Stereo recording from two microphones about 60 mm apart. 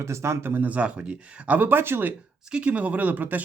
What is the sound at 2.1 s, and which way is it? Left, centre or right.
Speech, right.